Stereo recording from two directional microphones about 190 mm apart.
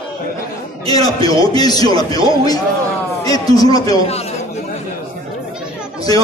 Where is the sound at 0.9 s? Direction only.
20° left (ahead or behind).